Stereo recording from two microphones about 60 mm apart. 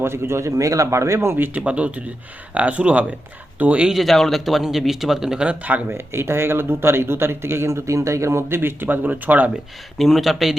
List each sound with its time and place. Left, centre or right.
0.0 s speech: right
0.5 s speech: right
1.4 s speech: right
3.8 s speech: centre; by 5.8 s right
5.9 s speech: right
10.0 s speech: centre